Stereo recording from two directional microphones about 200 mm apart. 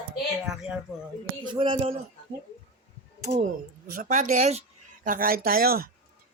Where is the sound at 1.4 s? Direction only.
25° right (ahead or behind).